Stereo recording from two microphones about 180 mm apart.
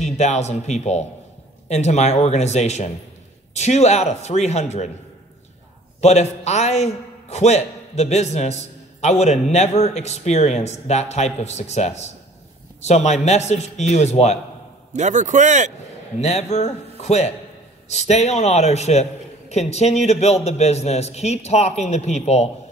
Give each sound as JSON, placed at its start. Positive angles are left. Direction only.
{"t": 0.0, "sound": "a man's voice", "side_deg": 40}
{"t": 5.9, "sound": "a man's voice", "side_deg": 40}
{"t": 14.9, "sound": "a man's voice", "side_deg": -40}
{"t": 16.2, "sound": "a man's voice", "side_deg": 35}